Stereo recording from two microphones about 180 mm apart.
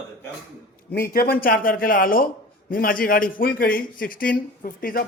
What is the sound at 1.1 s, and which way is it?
A man's voice, 55° left (ahead or behind).